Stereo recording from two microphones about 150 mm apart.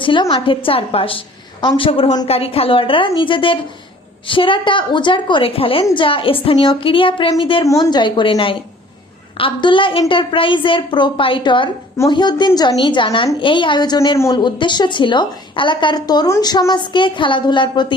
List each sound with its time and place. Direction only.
0.0 s a woman's voice: 35° left (ahead or behind)